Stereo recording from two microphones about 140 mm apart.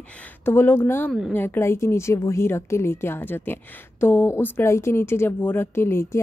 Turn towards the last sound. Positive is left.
turn(degrees=20)  # may be behind; listen again after turning